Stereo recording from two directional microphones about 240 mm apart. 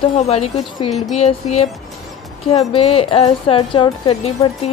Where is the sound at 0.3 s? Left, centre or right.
Left.